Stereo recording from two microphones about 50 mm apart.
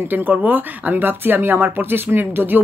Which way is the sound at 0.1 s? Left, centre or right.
Right.